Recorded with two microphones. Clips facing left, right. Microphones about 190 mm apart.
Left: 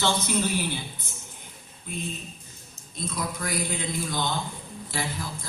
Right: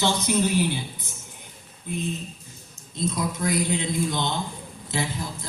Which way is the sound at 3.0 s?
20° right (ahead or behind).